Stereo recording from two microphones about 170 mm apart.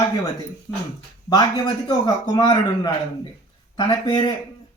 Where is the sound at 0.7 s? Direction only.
20° left (ahead or behind).